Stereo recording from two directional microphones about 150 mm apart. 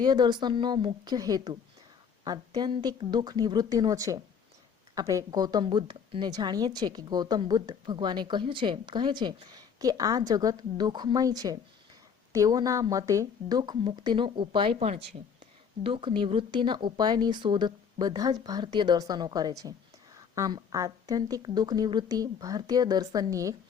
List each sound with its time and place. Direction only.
0.0 s a woman's voice: 30° right (ahead or behind)
2.6 s a woman's voice: 30° right (ahead or behind)